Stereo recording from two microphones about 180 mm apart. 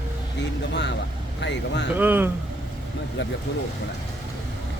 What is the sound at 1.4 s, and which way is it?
Speech, 75° left (ahead or behind).